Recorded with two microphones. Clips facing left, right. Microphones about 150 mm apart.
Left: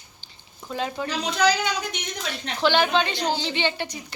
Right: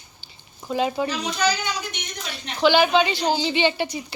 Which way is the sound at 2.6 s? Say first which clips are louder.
Right 4 dB; 5° right (ahead or behind).